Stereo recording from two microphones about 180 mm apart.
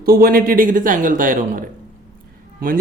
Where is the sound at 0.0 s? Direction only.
55° right (ahead or behind).